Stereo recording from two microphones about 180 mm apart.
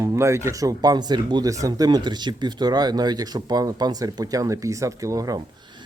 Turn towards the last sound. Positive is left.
turn(degrees=-20)  # may be behind; listen again after turning